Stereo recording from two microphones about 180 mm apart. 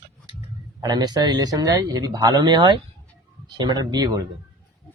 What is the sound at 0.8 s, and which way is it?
Speech, 20° right (ahead or behind).